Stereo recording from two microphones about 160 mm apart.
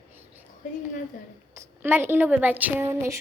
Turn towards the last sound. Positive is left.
turn(degrees=-15)  # may be behind; listen again after turning